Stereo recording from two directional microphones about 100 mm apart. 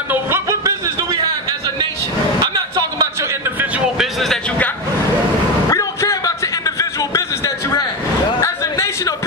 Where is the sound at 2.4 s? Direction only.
40° right (ahead or behind).